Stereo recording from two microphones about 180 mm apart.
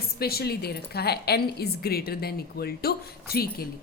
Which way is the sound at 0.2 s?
60° left (ahead or behind).